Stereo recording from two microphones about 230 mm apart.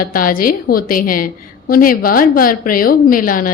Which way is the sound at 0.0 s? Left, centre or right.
Left.